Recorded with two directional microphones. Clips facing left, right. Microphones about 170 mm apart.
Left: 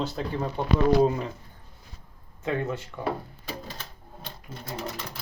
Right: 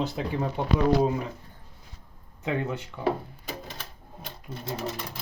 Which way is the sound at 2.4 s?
15° right (ahead or behind).